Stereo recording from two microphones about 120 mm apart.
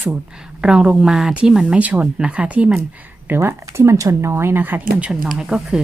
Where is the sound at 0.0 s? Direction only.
5° right (ahead or behind).